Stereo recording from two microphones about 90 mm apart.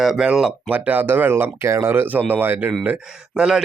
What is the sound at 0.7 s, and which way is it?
Speech, 20° right (ahead or behind).